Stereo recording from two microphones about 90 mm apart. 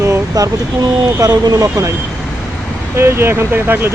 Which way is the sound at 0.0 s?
35° right (ahead or behind).